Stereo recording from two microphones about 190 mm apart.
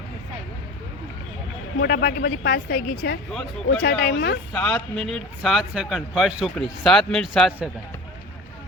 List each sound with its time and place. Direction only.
1.8 s a woman's voice: 55° left (ahead or behind)
4.5 s a man's voice: 10° left (ahead or behind)